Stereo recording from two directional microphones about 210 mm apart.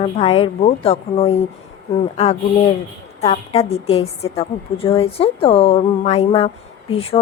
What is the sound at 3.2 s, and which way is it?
A woman's voice, 30° left (ahead or behind).